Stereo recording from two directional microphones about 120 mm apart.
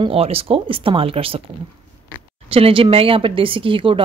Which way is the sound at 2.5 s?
50° right (ahead or behind).